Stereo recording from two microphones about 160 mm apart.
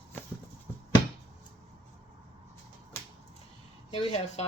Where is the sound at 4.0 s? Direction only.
40° left (ahead or behind).